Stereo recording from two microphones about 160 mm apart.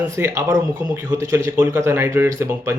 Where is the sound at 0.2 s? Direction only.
15° right (ahead or behind).